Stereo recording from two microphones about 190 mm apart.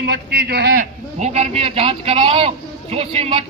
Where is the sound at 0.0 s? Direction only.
60° right (ahead or behind).